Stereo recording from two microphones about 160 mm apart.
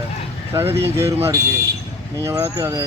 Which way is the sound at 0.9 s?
15° right (ahead or behind).